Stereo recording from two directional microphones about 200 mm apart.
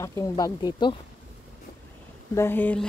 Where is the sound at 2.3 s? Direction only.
10° left (ahead or behind).